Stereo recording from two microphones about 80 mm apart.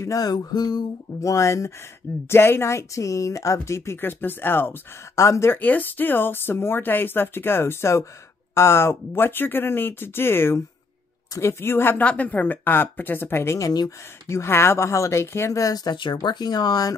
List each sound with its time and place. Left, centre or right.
0.0 s a woman's voice: left
1.3 s speech: left
5.1 s speech: left
5.5 s speech: left
12.0 s speech: centre
13.6 s a woman's voice: left